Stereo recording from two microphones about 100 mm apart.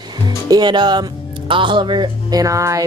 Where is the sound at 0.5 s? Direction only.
45° right (ahead or behind).